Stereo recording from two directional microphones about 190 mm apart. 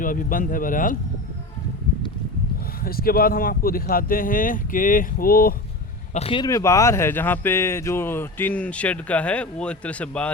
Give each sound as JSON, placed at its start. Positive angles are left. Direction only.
{"t": 0.0, "sound": "speech", "side_deg": 45}
{"t": 2.8, "sound": "speech", "side_deg": 50}
{"t": 6.1, "sound": "speech", "side_deg": 30}